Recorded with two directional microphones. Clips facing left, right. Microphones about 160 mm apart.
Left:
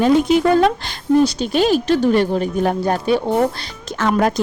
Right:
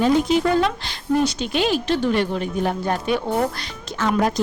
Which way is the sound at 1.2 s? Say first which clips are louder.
Left 5 dB; 40° left (ahead or behind).